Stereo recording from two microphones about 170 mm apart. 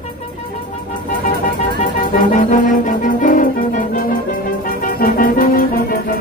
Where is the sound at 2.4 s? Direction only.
50° left (ahead or behind).